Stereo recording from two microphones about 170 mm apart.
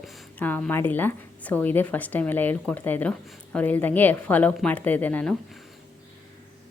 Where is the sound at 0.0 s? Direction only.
Centre (ahead or behind).